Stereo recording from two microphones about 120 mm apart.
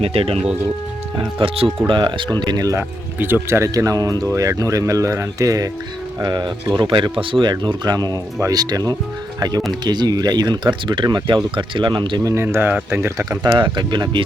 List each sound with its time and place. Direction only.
0.0 s speech: 55° right (ahead or behind); by 2.8 s 30° right (ahead or behind)
3.2 s speech: 15° right (ahead or behind); by 12.3 s 40° right (ahead or behind)
12.3 s speech: 20° right (ahead or behind)
13.6 s speech: 40° right (ahead or behind)